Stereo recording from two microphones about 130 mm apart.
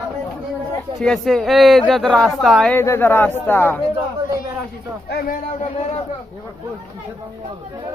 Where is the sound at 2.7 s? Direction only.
15° left (ahead or behind).